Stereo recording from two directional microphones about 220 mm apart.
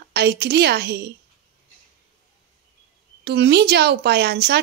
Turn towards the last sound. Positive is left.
turn(degrees=-50)  # may be behind; listen again after turning